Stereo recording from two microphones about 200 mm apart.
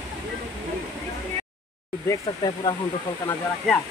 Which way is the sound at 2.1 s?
20° left (ahead or behind).